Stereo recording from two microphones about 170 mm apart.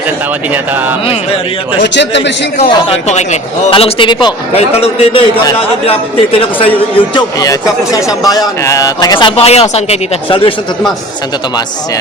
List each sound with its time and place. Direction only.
1.8 s speech: 90° left
2.6 s speech: 35° left (ahead or behind)
7.1 s speech: 25° left (ahead or behind)